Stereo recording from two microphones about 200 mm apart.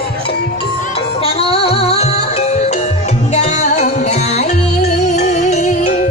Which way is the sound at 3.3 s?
35° left (ahead or behind).